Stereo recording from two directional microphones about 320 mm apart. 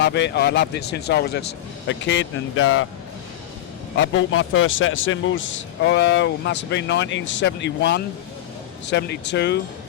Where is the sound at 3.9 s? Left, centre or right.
Left.